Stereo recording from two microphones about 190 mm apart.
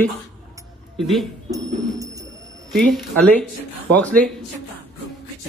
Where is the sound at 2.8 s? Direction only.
Centre (ahead or behind).